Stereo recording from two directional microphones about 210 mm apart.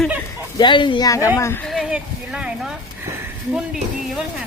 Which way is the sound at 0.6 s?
20° left (ahead or behind).